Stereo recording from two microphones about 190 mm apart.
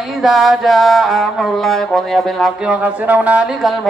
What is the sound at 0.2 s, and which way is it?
Music, centre (ahead or behind).